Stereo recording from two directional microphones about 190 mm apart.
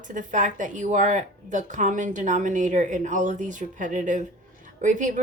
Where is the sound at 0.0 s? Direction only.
40° right (ahead or behind).